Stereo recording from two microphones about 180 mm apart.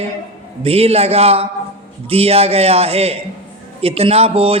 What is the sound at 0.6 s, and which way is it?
A man's voice, 35° right (ahead or behind).